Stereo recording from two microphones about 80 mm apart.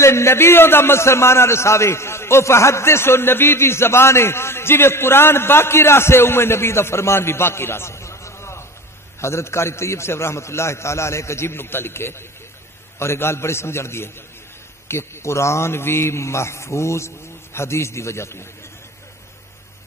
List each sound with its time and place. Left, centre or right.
0.0 s a man's voice: left